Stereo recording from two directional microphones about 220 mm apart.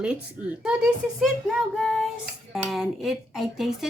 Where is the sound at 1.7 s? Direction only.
Centre (ahead or behind).